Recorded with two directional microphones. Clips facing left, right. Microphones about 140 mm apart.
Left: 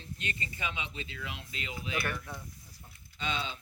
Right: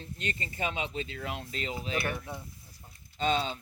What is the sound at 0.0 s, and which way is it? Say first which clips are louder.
Speech: right 3 dB; 40° right (ahead or behind).